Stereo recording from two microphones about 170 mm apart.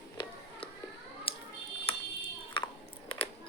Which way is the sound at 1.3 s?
35° left (ahead or behind).